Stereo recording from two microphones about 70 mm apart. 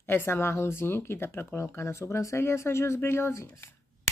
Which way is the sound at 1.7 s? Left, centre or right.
Left.